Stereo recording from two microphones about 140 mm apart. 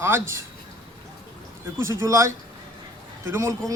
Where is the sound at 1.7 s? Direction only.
20° right (ahead or behind).